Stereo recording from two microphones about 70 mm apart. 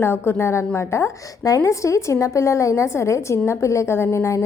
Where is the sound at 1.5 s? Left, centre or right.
Left.